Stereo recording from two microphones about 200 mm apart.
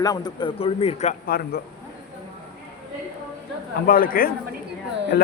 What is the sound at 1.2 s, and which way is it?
Speech, 50° left (ahead or behind).